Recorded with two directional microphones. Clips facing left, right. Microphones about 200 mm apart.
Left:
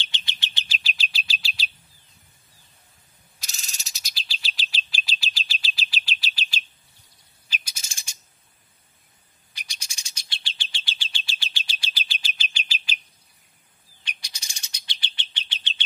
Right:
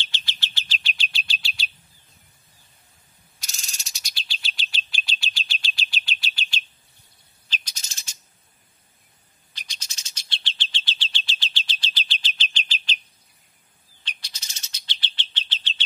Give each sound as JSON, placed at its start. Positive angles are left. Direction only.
{"t": 0.0, "sound": "bird", "side_deg": 15}
{"t": 0.8, "sound": "bird", "side_deg": 0}
{"t": 3.3, "sound": "bird", "side_deg": 0}
{"t": 9.5, "sound": "bird", "side_deg": 10}
{"t": 14.0, "sound": "bird", "side_deg": 10}